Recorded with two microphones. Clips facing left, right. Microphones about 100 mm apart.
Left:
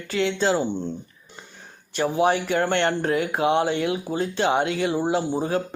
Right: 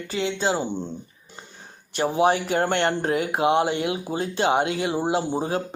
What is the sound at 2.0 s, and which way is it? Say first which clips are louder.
Speech: even; 25° right (ahead or behind).